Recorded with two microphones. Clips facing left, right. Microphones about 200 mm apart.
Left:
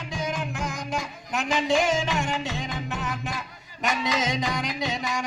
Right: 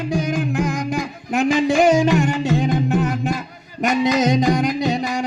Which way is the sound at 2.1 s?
50° right (ahead or behind).